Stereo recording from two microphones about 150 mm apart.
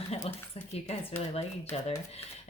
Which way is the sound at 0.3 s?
40° left (ahead or behind).